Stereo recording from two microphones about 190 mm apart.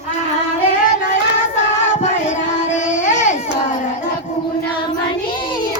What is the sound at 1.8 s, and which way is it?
Child singing, 40° left (ahead or behind).